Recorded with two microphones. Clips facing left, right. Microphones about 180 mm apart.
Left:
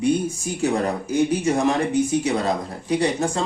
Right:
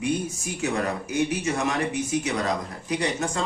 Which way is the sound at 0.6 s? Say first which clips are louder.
Left 5 dB; 35° left (ahead or behind).